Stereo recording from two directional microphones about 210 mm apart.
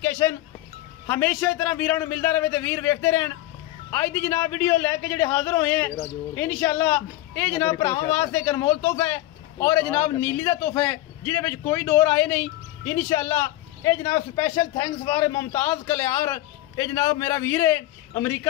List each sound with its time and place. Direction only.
0.2 s a man's voice: 10° left (ahead or behind)
7.7 s speech: 20° left (ahead or behind)
8.1 s a man's voice: 10° left (ahead or behind)